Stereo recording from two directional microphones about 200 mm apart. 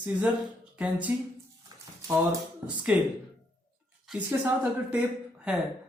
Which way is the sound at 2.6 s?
5° right (ahead or behind).